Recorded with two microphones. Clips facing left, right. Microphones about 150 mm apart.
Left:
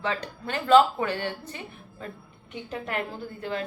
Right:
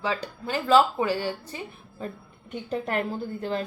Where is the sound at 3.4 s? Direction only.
35° right (ahead or behind).